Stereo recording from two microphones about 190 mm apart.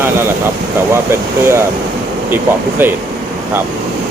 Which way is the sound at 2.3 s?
10° right (ahead or behind).